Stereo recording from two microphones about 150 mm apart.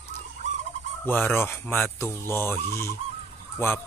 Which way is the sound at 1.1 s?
15° left (ahead or behind).